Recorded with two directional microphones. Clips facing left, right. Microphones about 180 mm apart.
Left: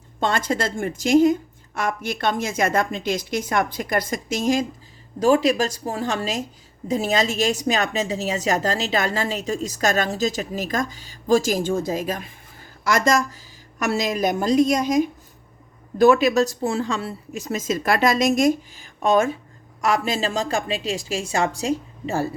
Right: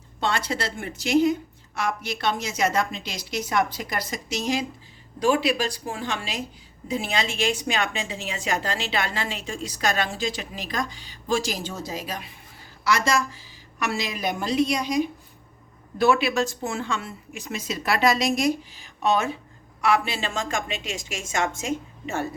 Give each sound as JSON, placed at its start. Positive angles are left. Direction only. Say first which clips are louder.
{"t": 0.2, "sound": "a woman's voice", "louder": "left 4 dB", "side_deg": 45}